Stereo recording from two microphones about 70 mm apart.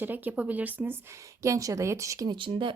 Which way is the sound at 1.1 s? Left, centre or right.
Right.